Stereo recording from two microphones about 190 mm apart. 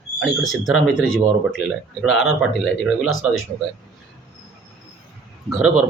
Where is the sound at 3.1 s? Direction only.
90° left.